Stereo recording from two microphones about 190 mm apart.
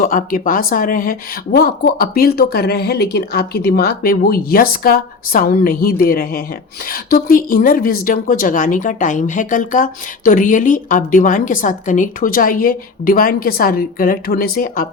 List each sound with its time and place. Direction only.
0.0 s a woman's voice: 45° left (ahead or behind)